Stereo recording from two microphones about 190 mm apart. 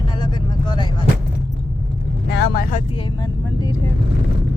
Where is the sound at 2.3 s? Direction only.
60° left (ahead or behind).